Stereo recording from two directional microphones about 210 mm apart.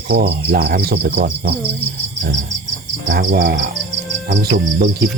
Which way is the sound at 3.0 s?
45° right (ahead or behind).